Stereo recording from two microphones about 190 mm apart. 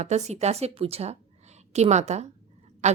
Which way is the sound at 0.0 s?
35° right (ahead or behind).